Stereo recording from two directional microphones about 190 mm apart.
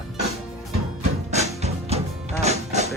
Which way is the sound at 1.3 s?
35° right (ahead or behind).